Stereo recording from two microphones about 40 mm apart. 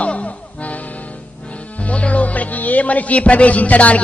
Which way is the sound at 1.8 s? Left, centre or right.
Left.